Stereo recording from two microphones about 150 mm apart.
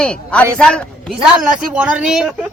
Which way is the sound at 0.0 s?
5° left (ahead or behind).